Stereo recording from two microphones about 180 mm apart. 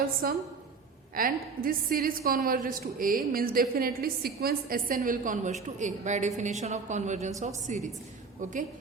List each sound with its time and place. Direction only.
0.2 s a woman's voice: 55° right (ahead or behind)